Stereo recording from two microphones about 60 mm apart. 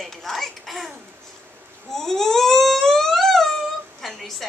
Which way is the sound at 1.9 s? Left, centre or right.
Centre.